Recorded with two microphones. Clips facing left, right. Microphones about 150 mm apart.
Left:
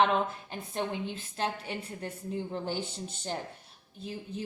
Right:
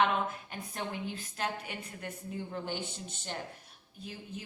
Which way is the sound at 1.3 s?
30° left (ahead or behind).